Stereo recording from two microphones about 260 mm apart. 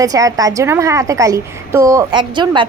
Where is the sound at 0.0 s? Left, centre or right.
Centre.